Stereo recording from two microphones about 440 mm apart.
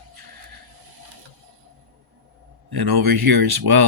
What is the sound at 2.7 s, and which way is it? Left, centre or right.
Speech, right.